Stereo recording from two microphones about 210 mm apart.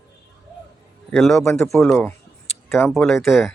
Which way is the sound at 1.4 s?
10° left (ahead or behind).